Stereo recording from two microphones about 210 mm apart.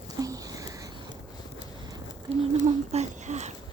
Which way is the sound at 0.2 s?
15° right (ahead or behind).